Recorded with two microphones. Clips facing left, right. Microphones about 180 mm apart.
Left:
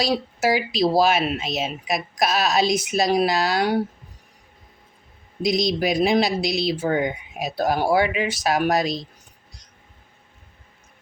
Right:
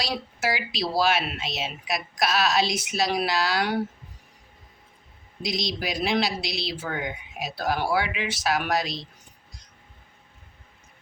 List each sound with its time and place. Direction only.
0.0 s speech: 45° left (ahead or behind)
5.5 s speech: 50° left (ahead or behind)